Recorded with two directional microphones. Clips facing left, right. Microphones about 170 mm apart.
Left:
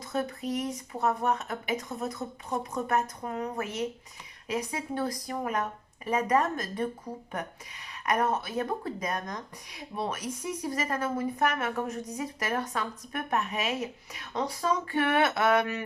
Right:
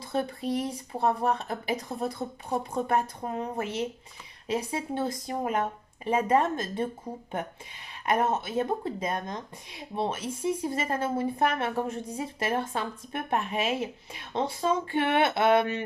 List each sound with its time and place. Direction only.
0.0 s a woman's voice: 30° right (ahead or behind)